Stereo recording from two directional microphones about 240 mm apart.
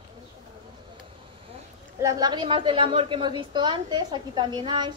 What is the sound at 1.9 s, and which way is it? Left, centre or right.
A woman's voice, centre.